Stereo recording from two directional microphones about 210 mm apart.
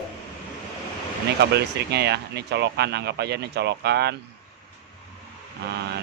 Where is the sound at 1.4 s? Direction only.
50° right (ahead or behind).